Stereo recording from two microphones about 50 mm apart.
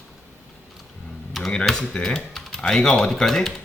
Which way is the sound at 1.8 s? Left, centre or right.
Centre.